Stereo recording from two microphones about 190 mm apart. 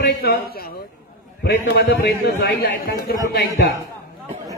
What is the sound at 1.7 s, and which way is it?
A man's voice, 55° left (ahead or behind).